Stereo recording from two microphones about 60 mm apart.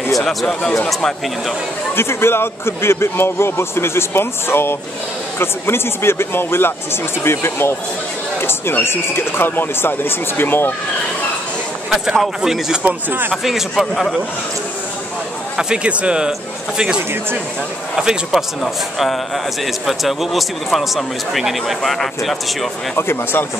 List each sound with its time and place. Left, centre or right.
0.3 s a man's voice: centre
2.0 s a man's voice: left
11.9 s speech: centre
12.8 s speech: right
13.3 s a man's voice: centre
15.5 s a man's voice: centre
22.9 s speech: left